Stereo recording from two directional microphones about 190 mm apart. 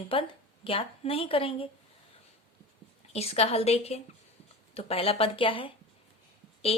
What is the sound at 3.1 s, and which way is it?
A woman's voice, 35° left (ahead or behind).